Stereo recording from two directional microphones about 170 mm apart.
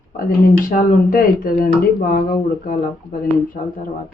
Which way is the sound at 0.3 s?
55° left (ahead or behind).